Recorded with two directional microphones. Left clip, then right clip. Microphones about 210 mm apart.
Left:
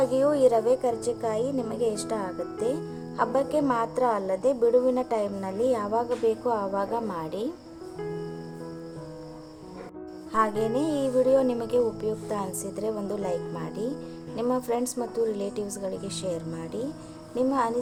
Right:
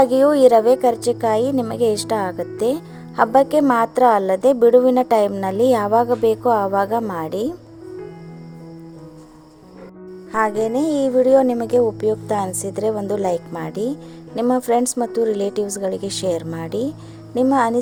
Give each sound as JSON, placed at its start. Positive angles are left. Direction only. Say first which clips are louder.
{"t": 0.0, "sound": "a woman's voice", "louder": "right 9 dB", "side_deg": -40}
{"t": 10.3, "sound": "a woman's voice", "louder": "right 6 dB", "side_deg": -30}